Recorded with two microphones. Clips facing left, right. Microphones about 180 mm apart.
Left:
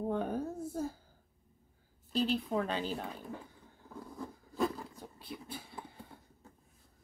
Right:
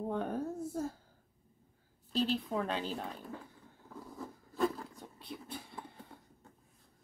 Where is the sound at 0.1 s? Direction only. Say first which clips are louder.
Left 1 dB; centre (ahead or behind).